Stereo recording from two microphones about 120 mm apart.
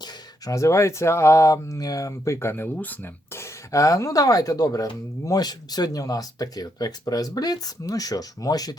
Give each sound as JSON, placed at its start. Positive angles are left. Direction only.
{"t": 0.4, "sound": "speech", "side_deg": 25}